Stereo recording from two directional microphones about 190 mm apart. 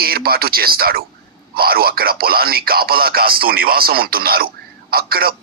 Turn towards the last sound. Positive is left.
turn(degrees=-50)  # may be behind; listen again after turning